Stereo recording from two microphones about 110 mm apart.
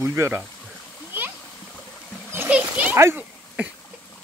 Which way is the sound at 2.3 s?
15° right (ahead or behind).